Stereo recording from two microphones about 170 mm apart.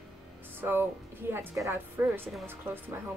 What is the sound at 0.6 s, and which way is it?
A woman's voice, 10° right (ahead or behind).